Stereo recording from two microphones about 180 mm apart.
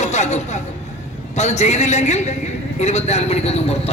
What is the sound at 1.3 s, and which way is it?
A man's voice, 40° left (ahead or behind).